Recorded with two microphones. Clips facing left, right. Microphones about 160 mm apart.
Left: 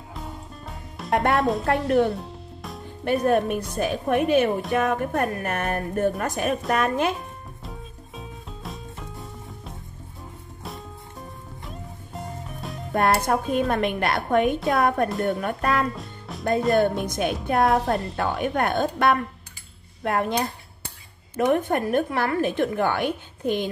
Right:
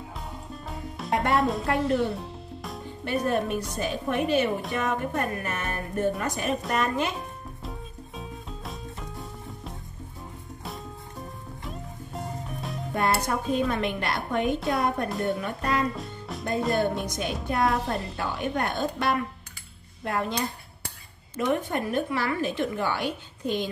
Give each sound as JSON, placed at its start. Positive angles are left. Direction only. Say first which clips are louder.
{"t": 0.1, "sound": "music", "louder": "left 1 dB", "side_deg": 0}
{"t": 1.1, "sound": "speech", "louder": "left 3 dB", "side_deg": 70}
{"t": 1.4, "sound": "a woman's voice", "louder": "left 3 dB", "side_deg": 0}
{"t": 2.0, "sound": "music", "louder": "left 4 dB", "side_deg": 0}
{"t": 3.1, "sound": "a woman's voice", "louder": "left 5 dB", "side_deg": 55}
{"t": 8.2, "sound": "music", "louder": "left 1 dB", "side_deg": 0}
{"t": 11.6, "sound": "music", "louder": "right 2 dB", "side_deg": 0}
{"t": 12.9, "sound": "music", "louder": "left 5 dB", "side_deg": 55}
{"t": 13.5, "sound": "a woman's voice", "louder": "left 3 dB", "side_deg": 55}
{"t": 16.0, "sound": "music", "louder": "right 1 dB", "side_deg": 0}
{"t": 17.0, "sound": "a woman's voice", "louder": "left 5 dB", "side_deg": 55}
{"t": 17.8, "sound": "a woman's voice", "louder": "left 5 dB", "side_deg": 0}
{"t": 18.1, "sound": "a woman's voice", "louder": "left 4 dB", "side_deg": 55}